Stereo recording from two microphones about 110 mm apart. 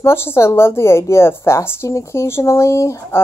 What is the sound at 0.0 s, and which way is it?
Speech, 25° left (ahead or behind).